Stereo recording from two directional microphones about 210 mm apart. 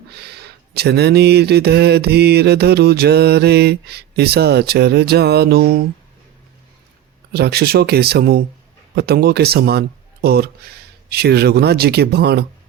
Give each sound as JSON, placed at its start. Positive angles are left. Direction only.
{"t": 0.1, "sound": "a sound", "side_deg": -50}
{"t": 0.8, "sound": "mantra", "side_deg": -50}
{"t": 7.3, "sound": "mantra", "side_deg": -50}